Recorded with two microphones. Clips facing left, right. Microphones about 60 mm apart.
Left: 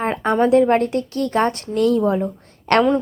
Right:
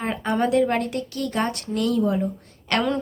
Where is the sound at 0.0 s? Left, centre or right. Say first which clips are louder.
Left 6 dB; left.